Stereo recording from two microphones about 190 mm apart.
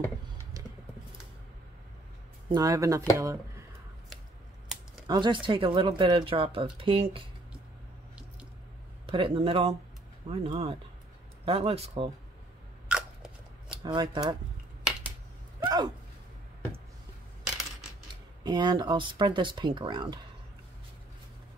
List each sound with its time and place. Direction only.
2.5 s speech: 20° right (ahead or behind)
5.0 s speech: 25° right (ahead or behind)
9.0 s speech: 30° right (ahead or behind)
12.8 s biting: 5° right (ahead or behind)
13.7 s speech: 25° right (ahead or behind)
14.8 s finger snapping: 5° right (ahead or behind)
15.6 s speech: 20° right (ahead or behind)
18.4 s speech: 25° right (ahead or behind)